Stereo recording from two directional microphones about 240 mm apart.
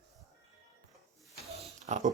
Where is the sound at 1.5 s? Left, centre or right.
Right.